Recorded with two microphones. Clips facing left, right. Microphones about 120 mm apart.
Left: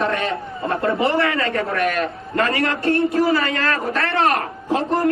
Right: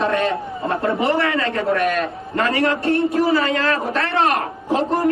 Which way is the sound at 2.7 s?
25° right (ahead or behind).